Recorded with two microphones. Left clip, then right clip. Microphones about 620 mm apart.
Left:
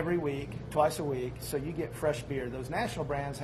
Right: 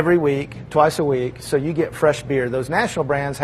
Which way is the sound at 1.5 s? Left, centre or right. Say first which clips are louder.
Right 16 dB; right.